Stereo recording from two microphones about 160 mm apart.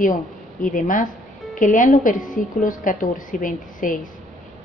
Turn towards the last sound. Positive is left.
turn(degrees=55)  # may be behind; listen again after turning